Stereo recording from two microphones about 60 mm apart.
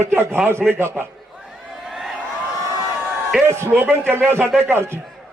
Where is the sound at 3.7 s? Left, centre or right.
Right.